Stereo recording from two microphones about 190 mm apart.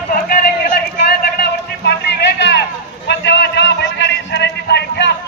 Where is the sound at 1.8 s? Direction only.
65° left (ahead or behind).